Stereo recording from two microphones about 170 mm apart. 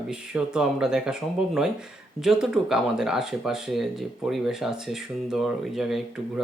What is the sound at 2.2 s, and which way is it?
Speech, 5° right (ahead or behind).